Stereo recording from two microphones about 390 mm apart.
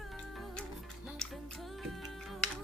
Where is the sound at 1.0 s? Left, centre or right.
Centre.